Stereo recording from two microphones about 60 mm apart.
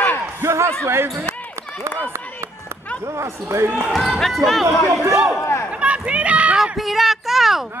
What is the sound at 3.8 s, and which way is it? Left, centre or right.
Speech, centre.